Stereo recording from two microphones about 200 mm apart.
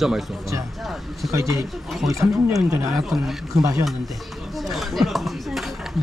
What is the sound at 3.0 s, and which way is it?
Speech, centre (ahead or behind).